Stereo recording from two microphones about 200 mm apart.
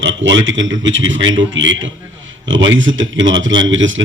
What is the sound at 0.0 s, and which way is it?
Speech, 70° right (ahead or behind).